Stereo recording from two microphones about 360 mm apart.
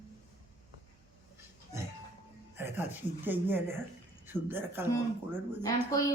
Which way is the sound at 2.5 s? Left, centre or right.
Centre.